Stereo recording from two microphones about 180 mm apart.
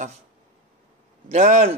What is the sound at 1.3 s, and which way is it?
Speech, 40° right (ahead or behind).